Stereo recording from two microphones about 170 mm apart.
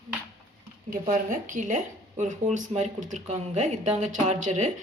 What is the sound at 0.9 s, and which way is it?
Speech, 50° right (ahead or behind).